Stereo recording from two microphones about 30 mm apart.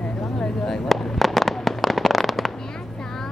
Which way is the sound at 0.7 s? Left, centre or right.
Centre.